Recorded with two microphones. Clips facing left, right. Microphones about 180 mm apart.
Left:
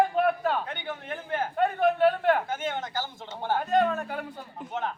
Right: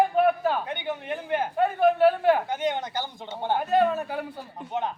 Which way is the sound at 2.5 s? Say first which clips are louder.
Right 4 dB; 15° right (ahead or behind).